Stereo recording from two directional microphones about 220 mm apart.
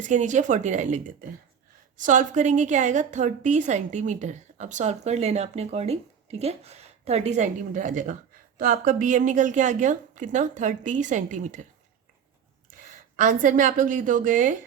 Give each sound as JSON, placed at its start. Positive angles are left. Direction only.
{"t": 0.0, "sound": "a woman's voice", "side_deg": -35}
{"t": 12.7, "sound": "a woman's voice", "side_deg": -35}